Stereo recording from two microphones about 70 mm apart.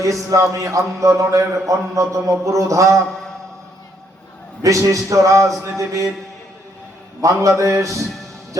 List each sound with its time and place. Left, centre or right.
0.5 s a man's voice: right
4.6 s a man's voice: right
7.2 s a man's voice: right